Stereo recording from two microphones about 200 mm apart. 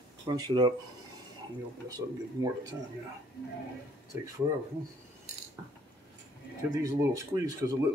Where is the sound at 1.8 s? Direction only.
20° right (ahead or behind).